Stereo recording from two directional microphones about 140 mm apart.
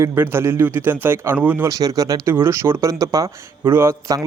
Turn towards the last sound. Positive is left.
turn(degrees=-25)  # may be behind; listen again after turning